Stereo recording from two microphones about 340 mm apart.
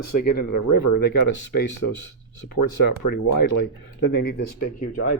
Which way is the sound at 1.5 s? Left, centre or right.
Left.